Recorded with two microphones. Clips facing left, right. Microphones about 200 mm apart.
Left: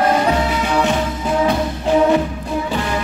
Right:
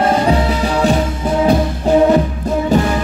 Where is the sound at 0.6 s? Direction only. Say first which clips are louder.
Right 3 dB; 35° right (ahead or behind).